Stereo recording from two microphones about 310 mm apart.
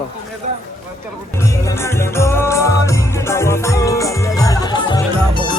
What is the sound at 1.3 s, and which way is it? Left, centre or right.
Music, centre.